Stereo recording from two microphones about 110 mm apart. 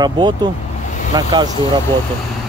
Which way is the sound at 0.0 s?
40° right (ahead or behind).